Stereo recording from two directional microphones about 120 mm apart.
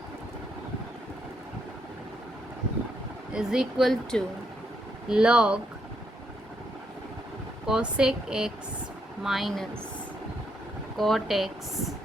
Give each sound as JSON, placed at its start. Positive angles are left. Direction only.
{"t": 3.3, "sound": "speech", "side_deg": -5}
{"t": 7.7, "sound": "speech", "side_deg": -5}
{"t": 10.9, "sound": "speech", "side_deg": 0}